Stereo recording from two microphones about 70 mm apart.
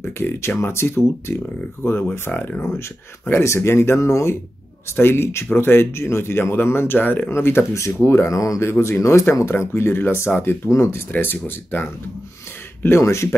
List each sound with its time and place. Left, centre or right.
0.2 s speech: left
11.1 s speech: left